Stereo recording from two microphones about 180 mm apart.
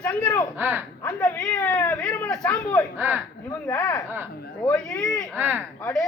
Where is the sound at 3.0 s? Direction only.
10° right (ahead or behind).